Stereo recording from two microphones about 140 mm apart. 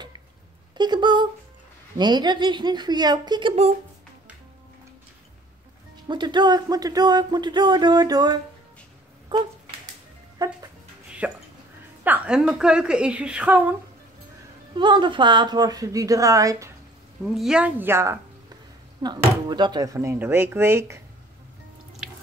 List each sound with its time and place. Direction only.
0.7 s speech: 30° right (ahead or behind)
6.0 s a woman's voice: 35° right (ahead or behind)
11.1 s hiccup: 5° right (ahead or behind)
12.0 s a woman's voice: 10° right (ahead or behind)
14.8 s a woman's voice: 35° right (ahead or behind)
17.3 s a woman's voice: 5° right (ahead or behind); by 18.6 s 20° right (ahead or behind)
19.0 s a woman's voice: 30° right (ahead or behind)